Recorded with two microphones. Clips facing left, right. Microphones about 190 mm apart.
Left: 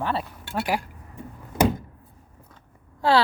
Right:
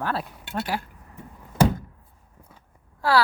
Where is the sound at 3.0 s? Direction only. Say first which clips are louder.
Left 2 dB; 25° left (ahead or behind).